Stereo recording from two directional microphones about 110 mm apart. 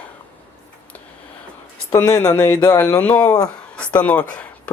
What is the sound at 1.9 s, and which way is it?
Speech, 30° left (ahead or behind).